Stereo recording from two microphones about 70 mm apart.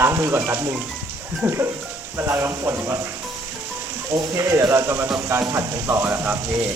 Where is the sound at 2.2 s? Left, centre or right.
Right.